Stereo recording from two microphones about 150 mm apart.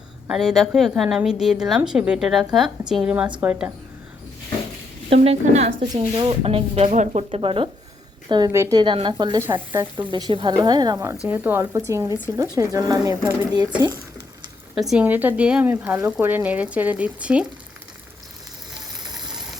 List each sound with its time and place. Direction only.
0.3 s a woman's voice: 5° right (ahead or behind)
5.0 s a woman's voice: 40° right (ahead or behind)
5.9 s speech: 35° right (ahead or behind)
8.8 s speech: 35° right (ahead or behind)
9.4 s speech: 15° right (ahead or behind)
10.1 s speech: 30° right (ahead or behind)
14.8 s a woman's voice: centre (ahead or behind)